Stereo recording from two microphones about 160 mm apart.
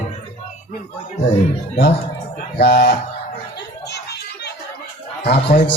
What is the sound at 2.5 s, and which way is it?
Speech, 80° left.